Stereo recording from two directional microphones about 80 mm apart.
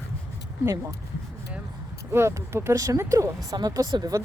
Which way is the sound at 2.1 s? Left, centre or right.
Right.